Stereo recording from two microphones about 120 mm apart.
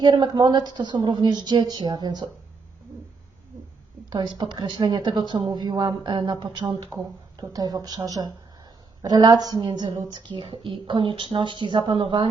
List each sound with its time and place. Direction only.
0.0 s a woman's voice: 40° right (ahead or behind)
4.1 s a woman's voice: 40° right (ahead or behind)